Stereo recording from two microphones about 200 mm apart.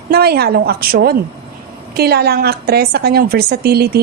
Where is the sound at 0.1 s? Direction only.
50° right (ahead or behind).